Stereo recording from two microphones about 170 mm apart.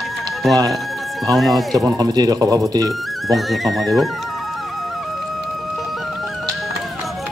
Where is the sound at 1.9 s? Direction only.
25° right (ahead or behind).